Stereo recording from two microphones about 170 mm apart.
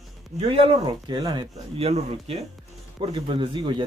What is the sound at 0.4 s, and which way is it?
Speech, 35° right (ahead or behind).